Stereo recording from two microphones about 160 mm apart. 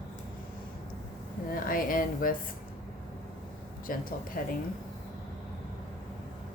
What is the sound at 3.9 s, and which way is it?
Speech, 65° left (ahead or behind).